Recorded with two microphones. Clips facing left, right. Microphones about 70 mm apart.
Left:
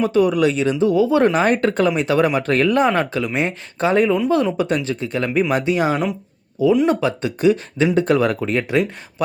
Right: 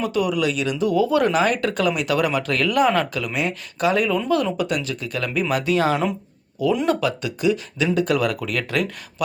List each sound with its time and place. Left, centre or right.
0.0 s speech: left
6.8 s speech: left